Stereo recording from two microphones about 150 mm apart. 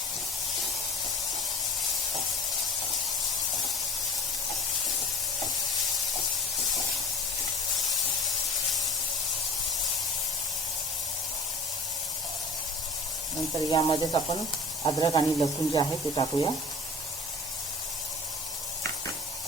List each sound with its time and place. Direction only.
13.7 s speech: 30° left (ahead or behind)